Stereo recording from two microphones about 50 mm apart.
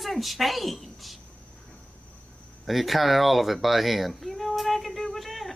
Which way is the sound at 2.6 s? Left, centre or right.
Centre.